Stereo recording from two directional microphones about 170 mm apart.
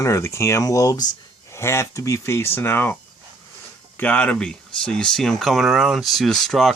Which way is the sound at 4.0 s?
10° left (ahead or behind).